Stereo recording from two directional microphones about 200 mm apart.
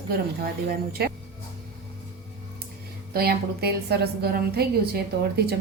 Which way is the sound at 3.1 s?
50° right (ahead or behind).